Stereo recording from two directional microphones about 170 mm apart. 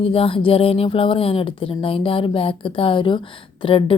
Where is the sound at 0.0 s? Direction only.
35° left (ahead or behind).